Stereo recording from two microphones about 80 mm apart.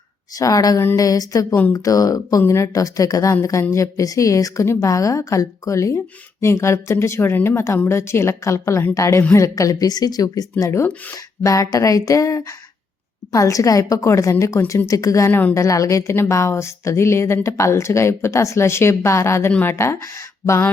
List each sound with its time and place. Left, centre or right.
0.3 s speech: left
15.3 s a woman's voice: left
15.5 s speech: left
19.5 s speech: left